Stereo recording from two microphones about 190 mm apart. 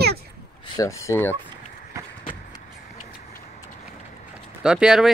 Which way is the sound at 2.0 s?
15° right (ahead or behind).